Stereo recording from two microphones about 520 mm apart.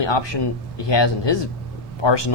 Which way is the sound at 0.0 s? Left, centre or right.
Left.